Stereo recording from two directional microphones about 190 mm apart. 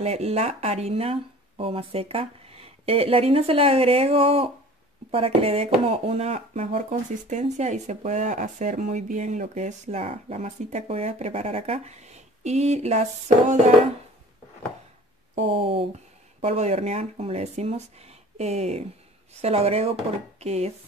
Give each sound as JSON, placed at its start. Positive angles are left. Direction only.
{"t": 0.0, "sound": "speech", "side_deg": -35}
{"t": 15.5, "sound": "speech", "side_deg": -30}